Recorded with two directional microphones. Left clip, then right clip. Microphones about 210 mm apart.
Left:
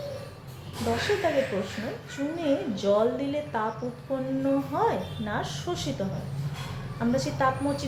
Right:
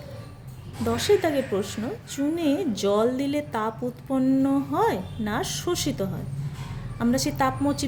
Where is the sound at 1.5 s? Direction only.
55° right (ahead or behind).